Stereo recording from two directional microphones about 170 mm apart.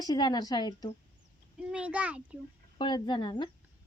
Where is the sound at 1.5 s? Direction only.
5° right (ahead or behind).